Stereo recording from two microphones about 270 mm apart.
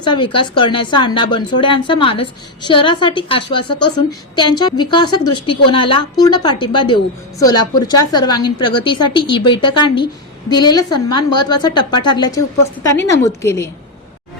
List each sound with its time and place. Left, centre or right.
0.0 s a woman's voice: centre